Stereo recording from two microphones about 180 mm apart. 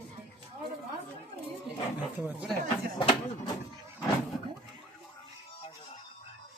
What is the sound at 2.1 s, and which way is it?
Speech, 10° right (ahead or behind).